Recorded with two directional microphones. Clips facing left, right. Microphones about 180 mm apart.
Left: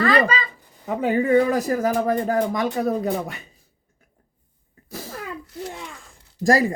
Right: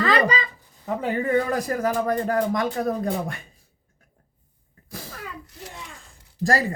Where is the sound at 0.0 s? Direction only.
20° right (ahead or behind).